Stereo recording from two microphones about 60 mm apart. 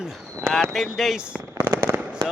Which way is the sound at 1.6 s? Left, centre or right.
Right.